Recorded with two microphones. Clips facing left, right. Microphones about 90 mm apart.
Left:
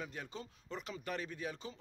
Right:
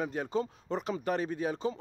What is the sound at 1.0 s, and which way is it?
Speech, 35° right (ahead or behind).